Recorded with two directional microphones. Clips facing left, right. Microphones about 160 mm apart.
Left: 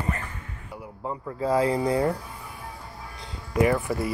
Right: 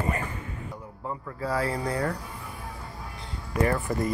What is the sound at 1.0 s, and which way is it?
Speech, 20° left (ahead or behind).